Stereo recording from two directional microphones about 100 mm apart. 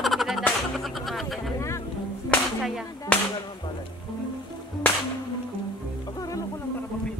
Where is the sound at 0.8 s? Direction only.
Centre (ahead or behind).